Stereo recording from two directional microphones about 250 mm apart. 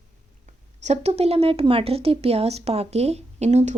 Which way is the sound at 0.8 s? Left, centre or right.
Right.